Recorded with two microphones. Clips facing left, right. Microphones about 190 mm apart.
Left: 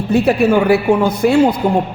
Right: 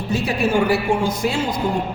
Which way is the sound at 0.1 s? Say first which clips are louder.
Left 8 dB; 60° left (ahead or behind).